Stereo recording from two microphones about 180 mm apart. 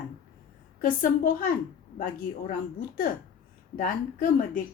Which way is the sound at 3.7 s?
50° left (ahead or behind).